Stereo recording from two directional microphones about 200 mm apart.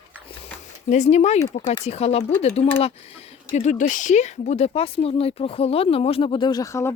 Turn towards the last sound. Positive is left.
turn(degrees=15)  # may be behind; listen again after turning